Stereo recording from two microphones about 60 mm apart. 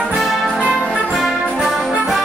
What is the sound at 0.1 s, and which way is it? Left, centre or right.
Music, centre.